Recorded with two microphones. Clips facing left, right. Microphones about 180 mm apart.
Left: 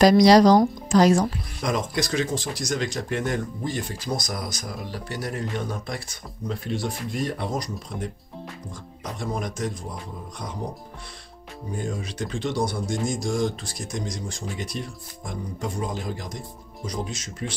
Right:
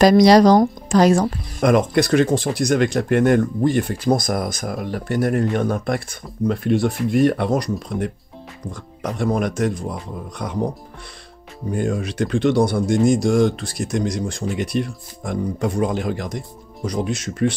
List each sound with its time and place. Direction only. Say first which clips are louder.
0.0 s speech: right 3 dB; 55° right (ahead or behind)
11.7 s speech: right 9 dB; 65° right (ahead or behind)